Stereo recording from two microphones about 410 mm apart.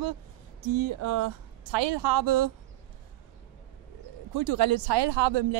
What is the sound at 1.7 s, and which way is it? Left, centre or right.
Speech, right.